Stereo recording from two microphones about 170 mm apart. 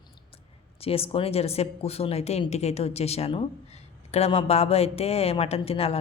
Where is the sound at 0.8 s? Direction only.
35° left (ahead or behind).